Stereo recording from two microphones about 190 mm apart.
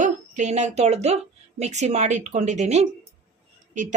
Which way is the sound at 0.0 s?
40° right (ahead or behind).